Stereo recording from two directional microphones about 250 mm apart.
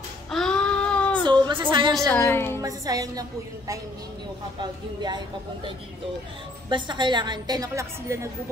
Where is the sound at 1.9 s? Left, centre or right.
Centre.